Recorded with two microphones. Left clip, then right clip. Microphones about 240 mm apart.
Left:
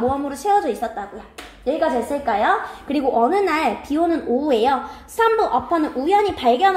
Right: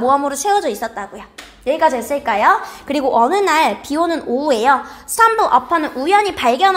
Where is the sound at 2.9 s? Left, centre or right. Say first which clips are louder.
Right 4 dB; right.